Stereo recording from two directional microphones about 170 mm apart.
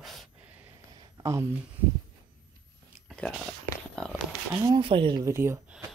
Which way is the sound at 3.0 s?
5° left (ahead or behind).